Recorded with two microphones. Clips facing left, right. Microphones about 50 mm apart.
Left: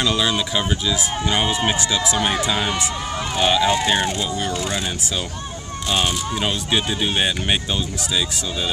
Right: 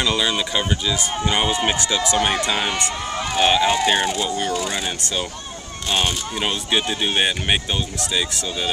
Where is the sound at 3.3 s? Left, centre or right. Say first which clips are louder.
Right 1 dB; centre.